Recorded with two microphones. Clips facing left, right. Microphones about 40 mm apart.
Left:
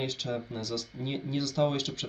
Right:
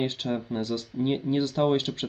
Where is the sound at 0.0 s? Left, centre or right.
Right.